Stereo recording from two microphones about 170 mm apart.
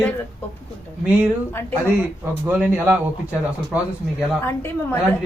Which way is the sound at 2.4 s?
10° right (ahead or behind).